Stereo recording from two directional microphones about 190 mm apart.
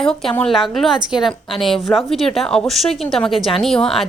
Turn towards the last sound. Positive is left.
turn(degrees=0)  # may be behind; listen again after turning